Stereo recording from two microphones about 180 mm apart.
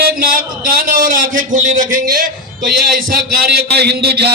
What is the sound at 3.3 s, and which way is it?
A man's voice, 65° right (ahead or behind).